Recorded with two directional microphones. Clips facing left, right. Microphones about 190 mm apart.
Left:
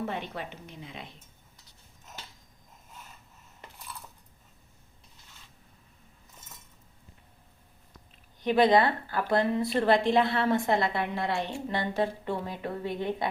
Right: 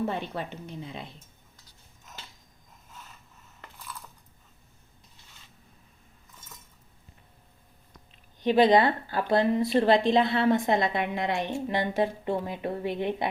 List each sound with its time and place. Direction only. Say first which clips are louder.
0.0 s a woman's voice: right 4 dB; 35° right (ahead or behind)
8.4 s a woman's voice: right 2 dB; 20° right (ahead or behind)